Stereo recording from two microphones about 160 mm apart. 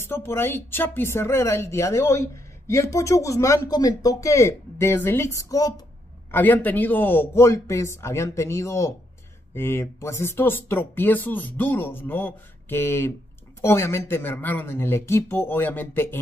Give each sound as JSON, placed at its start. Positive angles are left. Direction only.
{"t": 0.0, "sound": "speech", "side_deg": 15}